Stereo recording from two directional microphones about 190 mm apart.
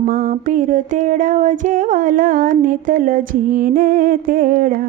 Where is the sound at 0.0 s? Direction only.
50° right (ahead or behind).